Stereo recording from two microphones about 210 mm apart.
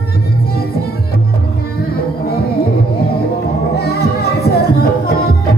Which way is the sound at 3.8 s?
50° left (ahead or behind).